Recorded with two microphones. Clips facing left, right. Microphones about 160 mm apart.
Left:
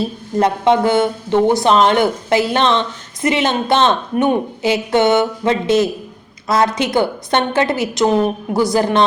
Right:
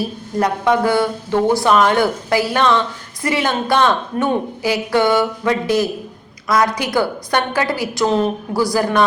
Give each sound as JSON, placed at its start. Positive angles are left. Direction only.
{"t": 0.0, "sound": "speech", "side_deg": 25}